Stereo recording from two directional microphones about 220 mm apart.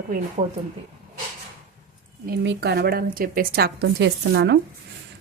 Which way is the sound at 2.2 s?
50° right (ahead or behind).